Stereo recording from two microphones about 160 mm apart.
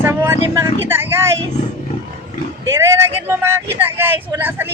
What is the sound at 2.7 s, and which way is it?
Speech, 20° right (ahead or behind).